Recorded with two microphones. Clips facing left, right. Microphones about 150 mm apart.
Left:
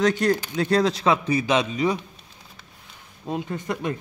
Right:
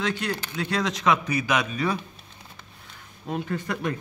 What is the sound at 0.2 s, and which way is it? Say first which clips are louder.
A man's voice: left 8 dB; 40° left (ahead or behind).